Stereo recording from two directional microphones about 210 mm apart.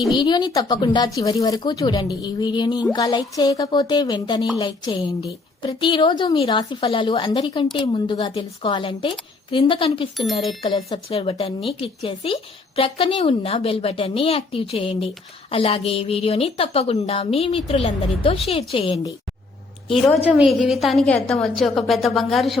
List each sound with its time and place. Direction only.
0.2 s a woman's voice: 20° left (ahead or behind)
20.3 s a woman's voice: 5° right (ahead or behind)